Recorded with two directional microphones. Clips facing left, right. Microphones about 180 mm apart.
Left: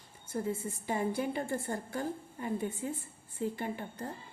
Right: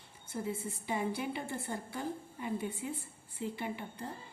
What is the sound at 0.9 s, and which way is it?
A woman's voice, 45° left (ahead or behind).